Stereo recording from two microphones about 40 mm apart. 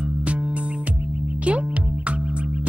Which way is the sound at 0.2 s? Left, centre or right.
Right.